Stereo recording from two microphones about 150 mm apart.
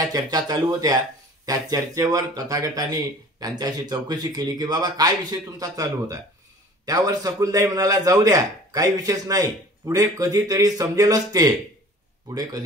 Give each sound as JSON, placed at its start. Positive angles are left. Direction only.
{"t": 0.0, "sound": "speech", "side_deg": -25}